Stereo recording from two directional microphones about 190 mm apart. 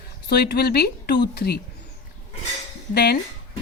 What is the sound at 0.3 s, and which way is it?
Speech, 60° left (ahead or behind).